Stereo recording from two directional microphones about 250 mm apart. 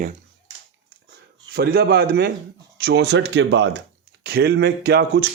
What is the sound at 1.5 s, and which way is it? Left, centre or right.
Speech, right.